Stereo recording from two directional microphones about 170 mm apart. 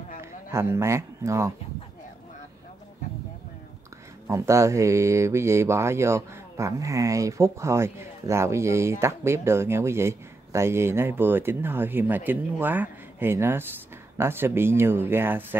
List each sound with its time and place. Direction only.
0.2 s speech: 15° right (ahead or behind)
4.3 s speech: 15° right (ahead or behind)